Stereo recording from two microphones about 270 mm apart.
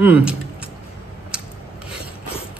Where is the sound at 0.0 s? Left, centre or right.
Centre.